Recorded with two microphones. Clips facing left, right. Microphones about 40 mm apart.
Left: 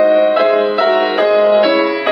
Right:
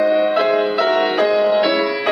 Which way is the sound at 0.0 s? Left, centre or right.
Centre.